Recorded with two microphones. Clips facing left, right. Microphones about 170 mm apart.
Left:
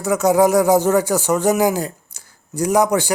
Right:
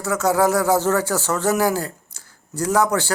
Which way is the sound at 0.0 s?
15° left (ahead or behind).